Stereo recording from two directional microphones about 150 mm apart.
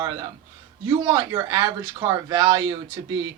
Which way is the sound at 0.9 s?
25° right (ahead or behind).